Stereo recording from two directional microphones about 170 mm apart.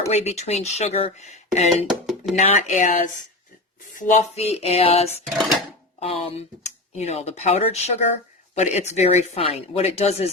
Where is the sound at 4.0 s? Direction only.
45° left (ahead or behind).